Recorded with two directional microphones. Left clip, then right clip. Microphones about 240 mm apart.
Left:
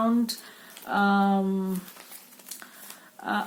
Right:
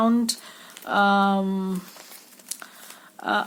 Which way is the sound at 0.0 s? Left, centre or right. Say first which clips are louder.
Right 4 dB; right.